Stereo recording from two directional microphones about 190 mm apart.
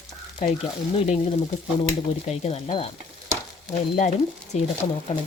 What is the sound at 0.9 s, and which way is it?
Speech, 30° left (ahead or behind).